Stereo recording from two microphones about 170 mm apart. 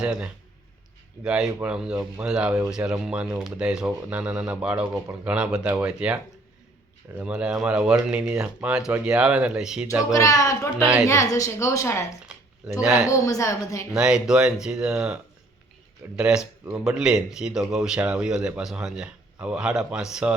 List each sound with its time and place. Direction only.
0.0 s speech: 5° right (ahead or behind)
7.2 s speech: 5° right (ahead or behind)
10.1 s a woman's voice: 20° left (ahead or behind)
12.8 s speech: 5° right (ahead or behind)
13.1 s a woman's voice: 20° left (ahead or behind)
13.9 s speech: 5° right (ahead or behind)